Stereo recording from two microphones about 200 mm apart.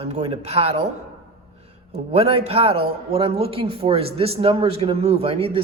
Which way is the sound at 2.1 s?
30° right (ahead or behind).